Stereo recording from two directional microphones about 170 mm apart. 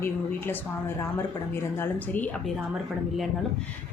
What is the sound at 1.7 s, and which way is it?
Speech, 10° left (ahead or behind).